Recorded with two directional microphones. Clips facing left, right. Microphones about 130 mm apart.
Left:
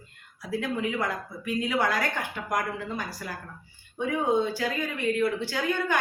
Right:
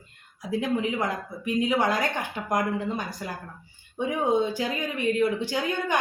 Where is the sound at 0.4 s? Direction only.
20° right (ahead or behind).